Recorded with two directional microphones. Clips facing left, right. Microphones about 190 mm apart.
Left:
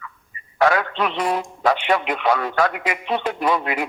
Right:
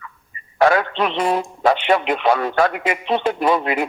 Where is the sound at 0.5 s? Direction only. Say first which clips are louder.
Right 3 dB; 30° right (ahead or behind).